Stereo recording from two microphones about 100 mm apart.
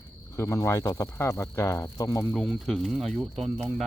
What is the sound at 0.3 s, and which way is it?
Speech, 30° left (ahead or behind).